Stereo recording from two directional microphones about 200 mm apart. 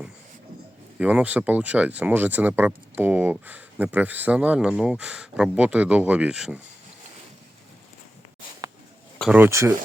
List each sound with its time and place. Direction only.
0.9 s speech: 5° right (ahead or behind)
9.3 s speech: 10° right (ahead or behind)